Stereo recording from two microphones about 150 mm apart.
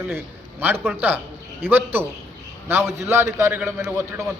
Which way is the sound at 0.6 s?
10° right (ahead or behind).